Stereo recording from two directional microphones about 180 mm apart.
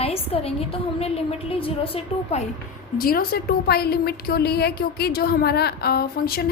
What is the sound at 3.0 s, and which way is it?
A woman's voice, 55° left (ahead or behind).